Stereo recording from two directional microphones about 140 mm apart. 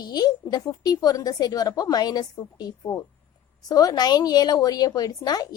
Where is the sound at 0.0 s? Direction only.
30° left (ahead or behind).